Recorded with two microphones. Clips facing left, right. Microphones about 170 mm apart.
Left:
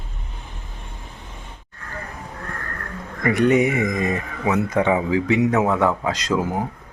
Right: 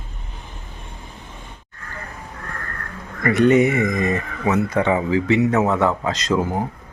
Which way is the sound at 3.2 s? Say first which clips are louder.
Right 2 dB; 10° left (ahead or behind).